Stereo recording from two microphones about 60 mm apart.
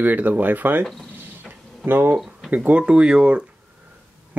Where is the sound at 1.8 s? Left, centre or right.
Right.